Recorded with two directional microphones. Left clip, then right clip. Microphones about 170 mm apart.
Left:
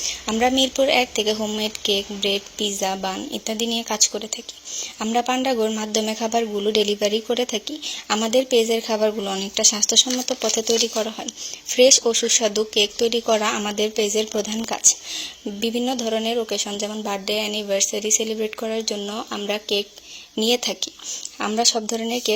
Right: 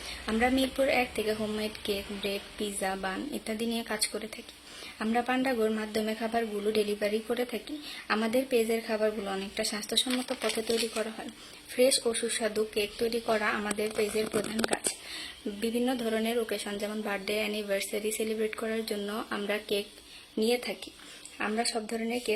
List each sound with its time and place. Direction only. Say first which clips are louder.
0.3 s speech: left 8 dB; 30° left (ahead or behind)
11.8 s speech: left 10 dB; 35° left (ahead or behind)
15.6 s a woman's voice: left 7 dB; 25° left (ahead or behind)